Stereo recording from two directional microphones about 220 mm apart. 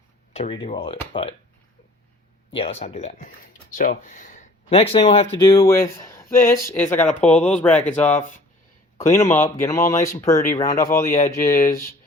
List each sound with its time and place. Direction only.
0.3 s speech: 25° left (ahead or behind)
2.5 s speech: 25° left (ahead or behind)
11.1 s speech: 35° left (ahead or behind)